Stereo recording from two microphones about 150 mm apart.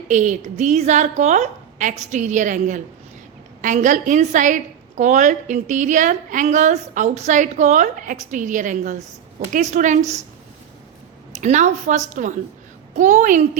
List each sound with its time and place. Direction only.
0.1 s a woman's voice: 55° right (ahead or behind)
11.3 s a woman's voice: 50° right (ahead or behind)